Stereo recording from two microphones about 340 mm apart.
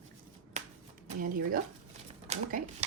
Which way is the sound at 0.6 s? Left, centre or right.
Centre.